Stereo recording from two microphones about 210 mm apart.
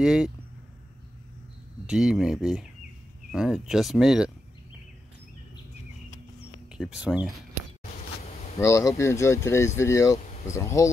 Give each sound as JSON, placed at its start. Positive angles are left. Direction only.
{"t": 0.0, "sound": "speech", "side_deg": -5}
{"t": 1.9, "sound": "speech", "side_deg": -5}
{"t": 6.7, "sound": "speech", "side_deg": -5}
{"t": 8.2, "sound": "a sound", "side_deg": 30}
{"t": 8.5, "sound": "speech", "side_deg": 15}